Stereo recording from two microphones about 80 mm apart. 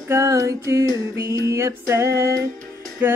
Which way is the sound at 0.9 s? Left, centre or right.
Right.